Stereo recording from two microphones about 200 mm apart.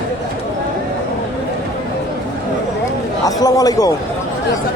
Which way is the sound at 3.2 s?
20° left (ahead or behind).